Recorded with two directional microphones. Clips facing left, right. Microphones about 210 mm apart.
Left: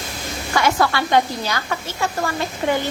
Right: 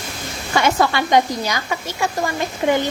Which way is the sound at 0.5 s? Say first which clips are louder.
Right 1 dB; 20° right (ahead or behind).